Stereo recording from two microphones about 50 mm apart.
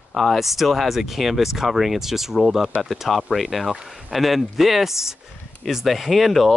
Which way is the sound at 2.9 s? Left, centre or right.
Centre.